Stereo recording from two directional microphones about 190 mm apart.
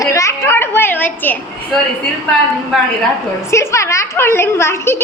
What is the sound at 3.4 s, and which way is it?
A woman's voice, 15° left (ahead or behind).